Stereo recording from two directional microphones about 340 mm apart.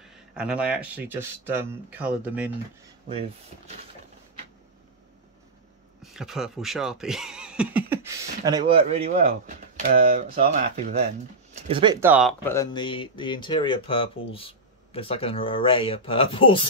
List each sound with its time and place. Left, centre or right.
0.0 s speech: centre
3.1 s speech: centre
6.1 s speech: centre